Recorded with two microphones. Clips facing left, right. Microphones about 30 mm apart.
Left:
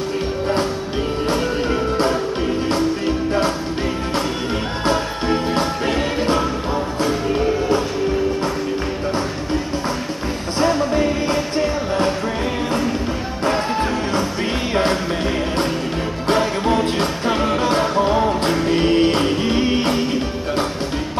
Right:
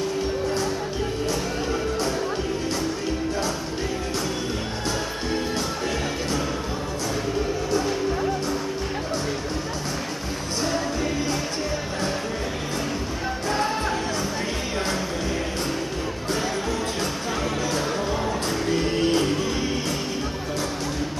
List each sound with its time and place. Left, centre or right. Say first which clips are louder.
1.2 s music: left 6 dB; left
4.8 s music: left 10 dB; left
16.3 s music: left 9 dB; left